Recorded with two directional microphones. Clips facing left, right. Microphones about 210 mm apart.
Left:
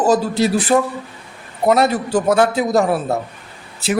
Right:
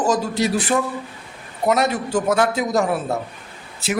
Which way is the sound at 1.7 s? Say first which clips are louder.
Left 4 dB; 35° left (ahead or behind).